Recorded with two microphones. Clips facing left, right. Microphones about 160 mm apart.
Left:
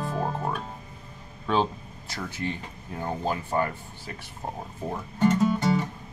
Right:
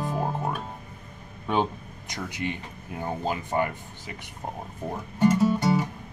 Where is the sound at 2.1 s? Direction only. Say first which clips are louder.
Even; 15° right (ahead or behind).